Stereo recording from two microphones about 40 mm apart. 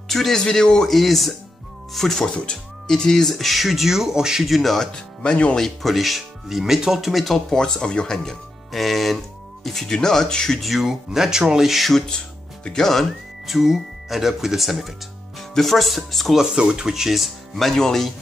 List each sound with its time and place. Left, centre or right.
0.1 s speech: centre
0.8 s speech: centre
2.2 s speech: left; by 4.5 s centre
4.5 s speech: centre
5.2 s speech: left
5.6 s speech: centre
8.7 s speech: centre
10.6 s speech: centre
10.9 s speech: centre
12.7 s speech: centre
13.5 s speech: centre
16.5 s speech: centre
16.9 s speech: centre
17.6 s speech: centre